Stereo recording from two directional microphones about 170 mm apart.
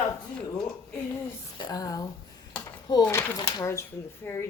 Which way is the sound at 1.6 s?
25° left (ahead or behind).